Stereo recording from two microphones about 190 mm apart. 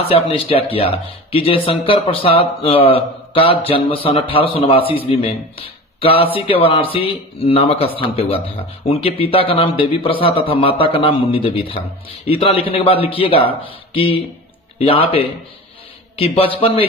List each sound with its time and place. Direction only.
0.1 s speech: 30° left (ahead or behind)